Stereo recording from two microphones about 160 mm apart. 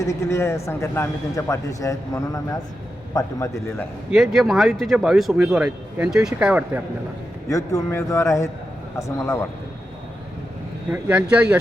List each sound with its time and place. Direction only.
0.0 s speech: 20° left (ahead or behind)
4.1 s speech: centre (ahead or behind)
7.5 s speech: 20° left (ahead or behind)
10.9 s speech: 10° right (ahead or behind)